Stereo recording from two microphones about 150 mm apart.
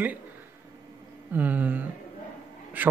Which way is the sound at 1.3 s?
10° right (ahead or behind).